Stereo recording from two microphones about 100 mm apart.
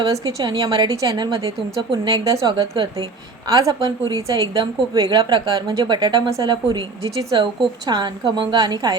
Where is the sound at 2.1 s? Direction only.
35° right (ahead or behind).